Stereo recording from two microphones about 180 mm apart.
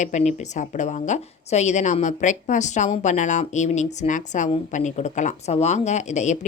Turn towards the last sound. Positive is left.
turn(degrees=40)  # may be behind; listen again after turning